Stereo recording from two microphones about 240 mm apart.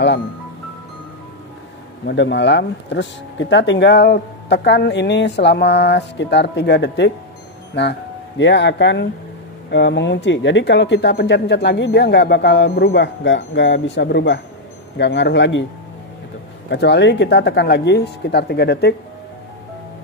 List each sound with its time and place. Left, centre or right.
2.0 s speech: left
16.7 s speech: left